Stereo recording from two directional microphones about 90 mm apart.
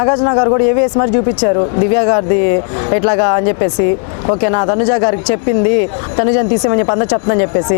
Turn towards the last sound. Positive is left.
turn(degrees=25)  # may be behind; listen again after turning